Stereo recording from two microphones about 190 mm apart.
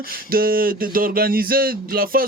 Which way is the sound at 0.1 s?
50° right (ahead or behind).